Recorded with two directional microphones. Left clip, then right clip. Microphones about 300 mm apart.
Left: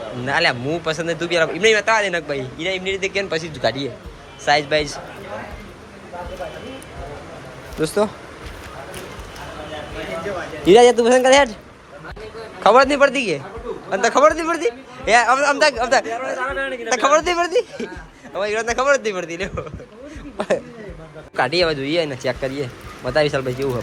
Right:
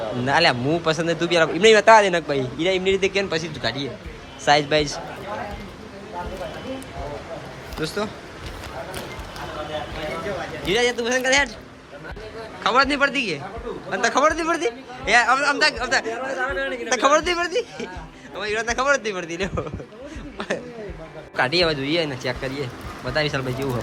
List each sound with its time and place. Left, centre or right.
0.3 s a man's voice: centre
7.8 s a man's voice: centre
10.7 s a man's voice: centre
12.6 s a man's voice: centre
21.3 s a man's voice: centre